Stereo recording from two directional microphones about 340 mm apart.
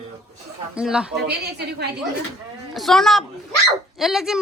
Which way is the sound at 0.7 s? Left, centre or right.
Centre.